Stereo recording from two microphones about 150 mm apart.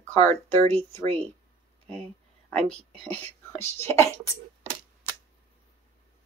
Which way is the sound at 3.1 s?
15° left (ahead or behind).